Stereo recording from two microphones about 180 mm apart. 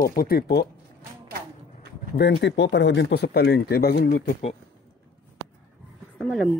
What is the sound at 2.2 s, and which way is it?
Speech, 70° left (ahead or behind).